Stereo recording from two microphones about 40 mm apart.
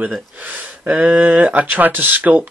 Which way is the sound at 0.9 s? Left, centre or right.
Right.